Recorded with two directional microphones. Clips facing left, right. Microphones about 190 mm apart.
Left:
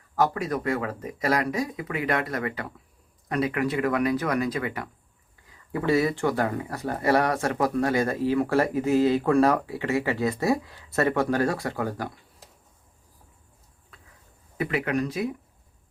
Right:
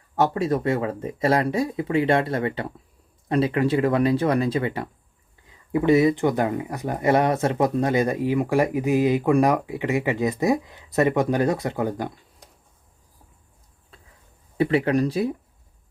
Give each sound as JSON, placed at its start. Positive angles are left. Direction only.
{"t": 0.2, "sound": "speech", "side_deg": -25}
{"t": 13.9, "sound": "a sound", "side_deg": -30}
{"t": 14.6, "sound": "speech", "side_deg": -30}